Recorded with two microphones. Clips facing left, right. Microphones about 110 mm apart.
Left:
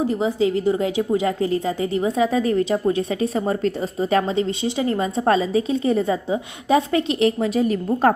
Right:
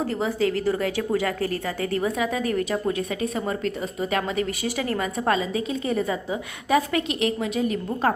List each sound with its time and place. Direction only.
0.0 s a woman's voice: 15° left (ahead or behind); by 8.1 s 35° left (ahead or behind)